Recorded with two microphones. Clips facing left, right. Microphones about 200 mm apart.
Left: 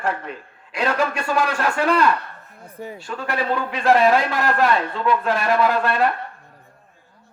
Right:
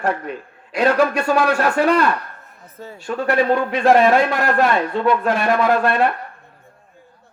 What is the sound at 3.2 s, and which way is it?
Speech, 45° right (ahead or behind).